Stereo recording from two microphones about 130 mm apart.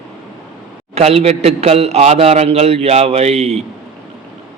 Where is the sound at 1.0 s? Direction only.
55° right (ahead or behind).